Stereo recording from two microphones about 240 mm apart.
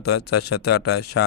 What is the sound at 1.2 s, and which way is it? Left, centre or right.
Speech, left.